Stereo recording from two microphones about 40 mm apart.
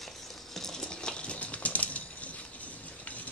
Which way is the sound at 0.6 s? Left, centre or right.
Centre.